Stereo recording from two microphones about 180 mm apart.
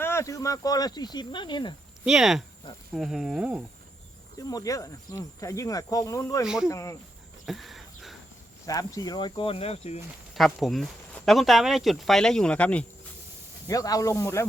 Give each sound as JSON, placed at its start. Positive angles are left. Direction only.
{"t": 0.0, "sound": "speech", "side_deg": 15}
{"t": 2.0, "sound": "speech", "side_deg": -5}
{"t": 4.4, "sound": "speech", "side_deg": 20}
{"t": 6.4, "sound": "speech", "side_deg": -5}
{"t": 6.7, "sound": "speech", "side_deg": 15}
{"t": 7.4, "sound": "a sound", "side_deg": 0}
{"t": 8.6, "sound": "speech", "side_deg": 20}
{"t": 10.3, "sound": "speech", "side_deg": 0}
{"t": 13.7, "sound": "speech", "side_deg": 20}